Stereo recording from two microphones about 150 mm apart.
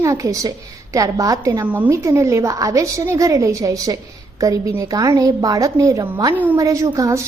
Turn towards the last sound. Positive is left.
turn(degrees=-20)  # may be behind; listen again after turning